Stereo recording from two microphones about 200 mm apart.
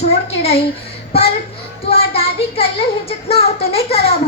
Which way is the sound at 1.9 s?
30° left (ahead or behind).